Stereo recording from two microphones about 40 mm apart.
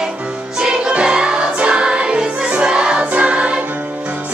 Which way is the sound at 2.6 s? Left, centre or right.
Right.